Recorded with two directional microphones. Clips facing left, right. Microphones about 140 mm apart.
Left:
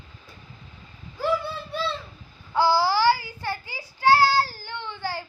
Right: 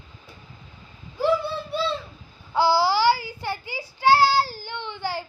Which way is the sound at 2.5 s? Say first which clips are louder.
Right 1 dB; 15° right (ahead or behind).